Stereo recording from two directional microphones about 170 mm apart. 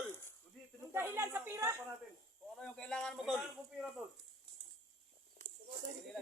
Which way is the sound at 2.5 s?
5° left (ahead or behind).